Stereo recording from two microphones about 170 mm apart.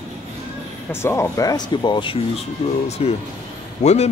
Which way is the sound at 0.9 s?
15° left (ahead or behind).